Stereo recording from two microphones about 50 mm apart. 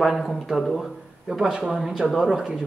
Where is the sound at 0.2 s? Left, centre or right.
Centre.